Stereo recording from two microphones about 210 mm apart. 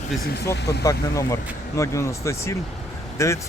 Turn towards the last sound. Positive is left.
turn(degrees=15)  # may be behind; listen again after turning